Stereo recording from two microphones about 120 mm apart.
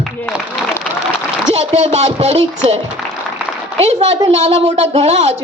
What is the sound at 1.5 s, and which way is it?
A woman's voice, 60° right (ahead or behind).